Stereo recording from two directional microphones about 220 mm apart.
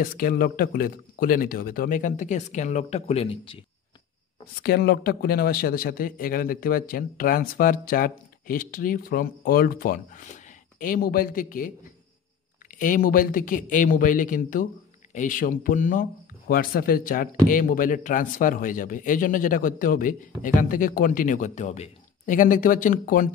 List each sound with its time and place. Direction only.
0.0 s speech: 40° left (ahead or behind); by 3.6 s 25° left (ahead or behind)
4.6 s speech: 45° left (ahead or behind)
12.7 s speech: 35° left (ahead or behind)